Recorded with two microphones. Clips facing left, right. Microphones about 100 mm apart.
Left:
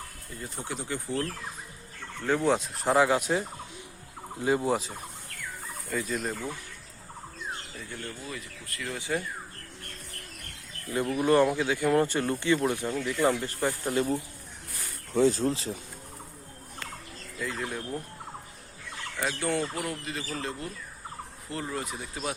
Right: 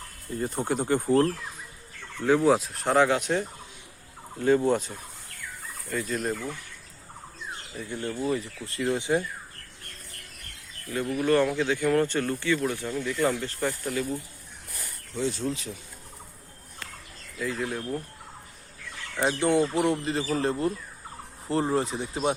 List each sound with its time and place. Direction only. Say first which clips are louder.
0.3 s speech: right 9 dB; 45° right (ahead or behind)
2.2 s speech: right 4 dB; 5° right (ahead or behind)
7.8 s speech: right 8 dB; 20° right (ahead or behind)
11.1 s speech: even; 15° left (ahead or behind)
13.8 s speech: left 2 dB; 30° left (ahead or behind)
15.1 s speech: left 5 dB; 45° left (ahead or behind)
17.3 s speech: right 3 dB; centre (ahead or behind)
19.1 s speech: right 6 dB; 25° right (ahead or behind)